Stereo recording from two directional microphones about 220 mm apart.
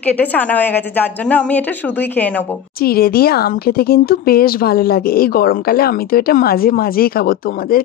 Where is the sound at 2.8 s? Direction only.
45° left (ahead or behind).